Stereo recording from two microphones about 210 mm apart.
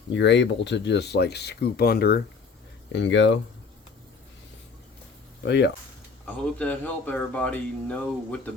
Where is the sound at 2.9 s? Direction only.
60° left (ahead or behind).